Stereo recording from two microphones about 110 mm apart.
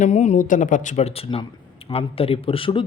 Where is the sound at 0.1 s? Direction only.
90° left.